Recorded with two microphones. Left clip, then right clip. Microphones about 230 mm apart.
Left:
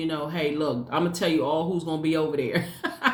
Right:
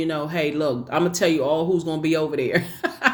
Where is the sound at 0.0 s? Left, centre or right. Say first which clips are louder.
Right 4 dB; right.